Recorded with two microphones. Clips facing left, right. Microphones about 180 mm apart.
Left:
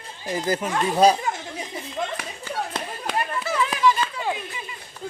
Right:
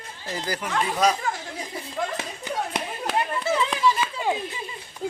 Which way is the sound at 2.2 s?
15° right (ahead or behind).